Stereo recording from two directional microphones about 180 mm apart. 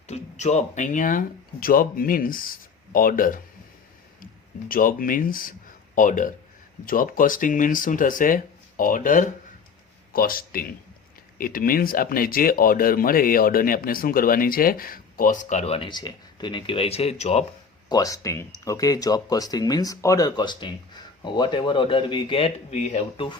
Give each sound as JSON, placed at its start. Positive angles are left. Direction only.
{"t": 0.1, "sound": "speech", "side_deg": 40}
{"t": 4.7, "sound": "speech", "side_deg": 50}
{"t": 17.8, "sound": "speech", "side_deg": 20}